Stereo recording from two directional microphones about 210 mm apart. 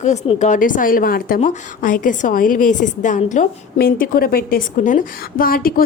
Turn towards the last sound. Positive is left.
turn(degrees=45)  # may be behind; listen again after turning